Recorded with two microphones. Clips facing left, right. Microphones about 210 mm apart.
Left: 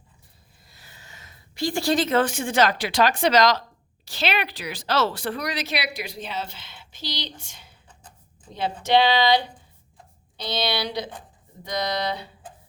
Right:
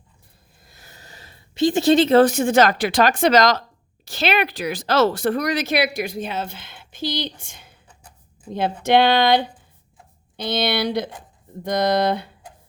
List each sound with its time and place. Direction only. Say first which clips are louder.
0.6 s speech: right 4 dB; 50° right (ahead or behind)